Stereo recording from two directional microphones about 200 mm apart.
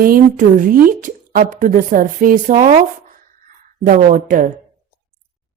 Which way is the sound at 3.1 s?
40° right (ahead or behind).